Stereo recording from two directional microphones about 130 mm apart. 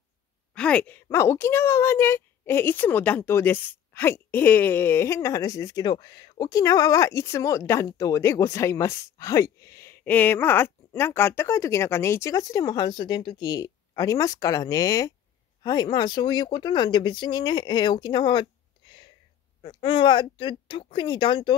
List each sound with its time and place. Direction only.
0.6 s a woman's voice: 10° left (ahead or behind); by 21.5 s 40° left (ahead or behind)